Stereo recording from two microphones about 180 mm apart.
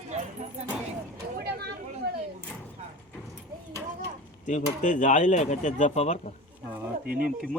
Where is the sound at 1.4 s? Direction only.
65° right (ahead or behind).